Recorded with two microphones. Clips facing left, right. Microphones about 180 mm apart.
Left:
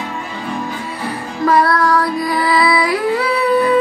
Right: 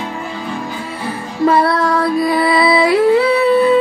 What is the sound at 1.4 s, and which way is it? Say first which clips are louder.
Music: right 1 dB; 25° right (ahead or behind).